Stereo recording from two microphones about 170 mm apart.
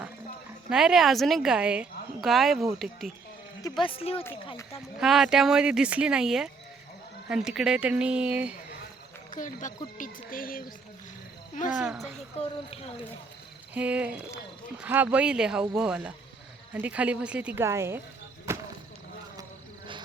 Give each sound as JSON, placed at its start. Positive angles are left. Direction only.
{"t": 0.7, "sound": "a woman's voice", "side_deg": -5}
{"t": 3.8, "sound": "a woman's voice", "side_deg": 35}
{"t": 4.9, "sound": "a woman's voice", "side_deg": 0}
{"t": 9.3, "sound": "speech", "side_deg": 50}
{"t": 11.7, "sound": "speech", "side_deg": -5}
{"t": 13.7, "sound": "speech", "side_deg": -10}
{"t": 18.5, "sound": "a sound", "side_deg": -15}